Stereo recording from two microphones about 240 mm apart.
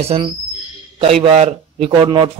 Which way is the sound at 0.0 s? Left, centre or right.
Right.